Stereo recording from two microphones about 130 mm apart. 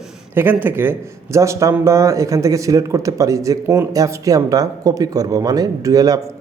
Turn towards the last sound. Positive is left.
turn(degrees=-25)  # may be behind; listen again after turning